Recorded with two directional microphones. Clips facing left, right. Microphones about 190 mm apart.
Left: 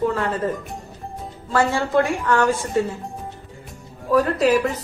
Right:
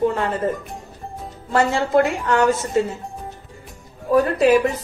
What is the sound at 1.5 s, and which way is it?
A woman's voice, 20° right (ahead or behind).